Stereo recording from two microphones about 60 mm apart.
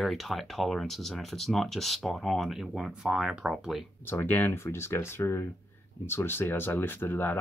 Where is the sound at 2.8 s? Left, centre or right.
Centre.